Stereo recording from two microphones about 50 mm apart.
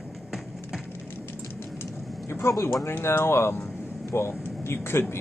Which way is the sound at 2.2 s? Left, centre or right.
Left.